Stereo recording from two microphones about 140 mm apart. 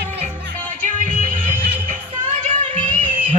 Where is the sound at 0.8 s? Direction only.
70° right (ahead or behind).